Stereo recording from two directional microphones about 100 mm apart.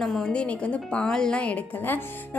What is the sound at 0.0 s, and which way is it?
A woman's voice, 5° left (ahead or behind).